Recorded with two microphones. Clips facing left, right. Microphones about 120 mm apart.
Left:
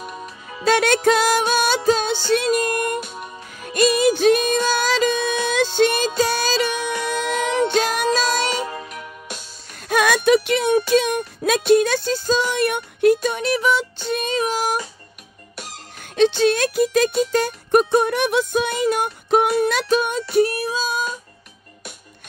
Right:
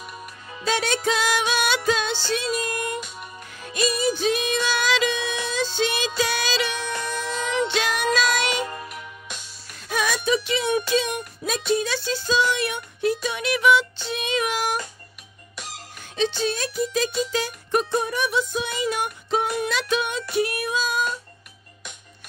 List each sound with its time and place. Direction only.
0.7 s music: 60° left (ahead or behind)
7.0 s music: 65° left (ahead or behind)
7.5 s music: 45° left (ahead or behind)
9.8 s a sound: 60° left (ahead or behind)
10.9 s music: 55° left (ahead or behind)
13.3 s music: 40° left (ahead or behind)
16.0 s music: 65° left (ahead or behind); by 20.2 s 45° left (ahead or behind)
20.3 s female singing: 35° left (ahead or behind)